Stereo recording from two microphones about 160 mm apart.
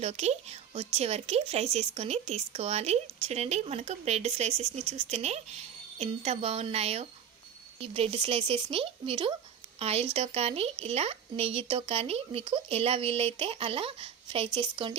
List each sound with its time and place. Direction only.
0.0 s speech: 40° right (ahead or behind)